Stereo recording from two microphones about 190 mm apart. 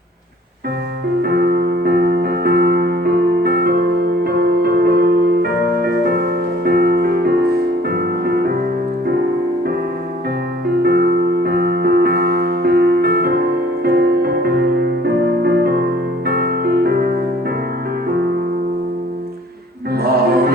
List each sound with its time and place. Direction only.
1.2 s music: 55° right (ahead or behind)
10.8 s music: 55° right (ahead or behind)
19.9 s music: 55° right (ahead or behind)